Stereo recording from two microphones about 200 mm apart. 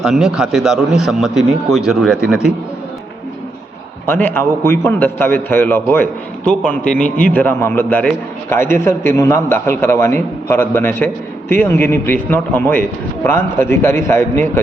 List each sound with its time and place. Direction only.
0.0 s a man's voice: centre (ahead or behind)
4.0 s a man's voice: 10° left (ahead or behind)